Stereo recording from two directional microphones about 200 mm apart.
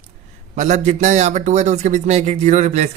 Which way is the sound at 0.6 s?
35° right (ahead or behind).